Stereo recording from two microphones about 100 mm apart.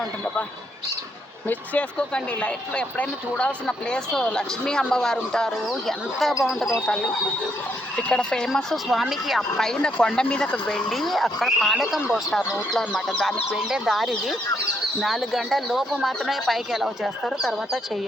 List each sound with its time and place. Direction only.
1.5 s speech: 10° left (ahead or behind); by 6.7 s 5° right (ahead or behind)
6.8 s speech: 10° left (ahead or behind)